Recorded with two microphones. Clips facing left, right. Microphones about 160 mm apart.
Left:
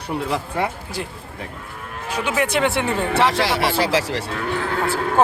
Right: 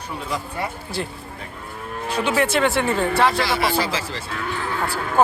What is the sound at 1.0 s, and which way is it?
Speech, 10° left (ahead or behind).